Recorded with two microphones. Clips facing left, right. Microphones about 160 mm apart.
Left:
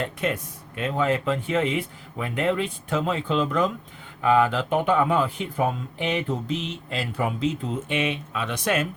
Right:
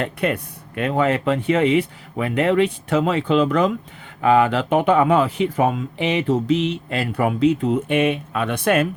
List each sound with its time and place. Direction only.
0.0 s speech: 60° right (ahead or behind)